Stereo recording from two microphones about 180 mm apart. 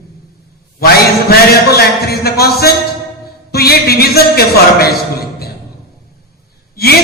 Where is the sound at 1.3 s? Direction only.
60° left (ahead or behind).